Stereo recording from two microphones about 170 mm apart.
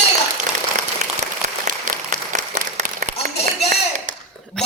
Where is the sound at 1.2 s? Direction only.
50° right (ahead or behind).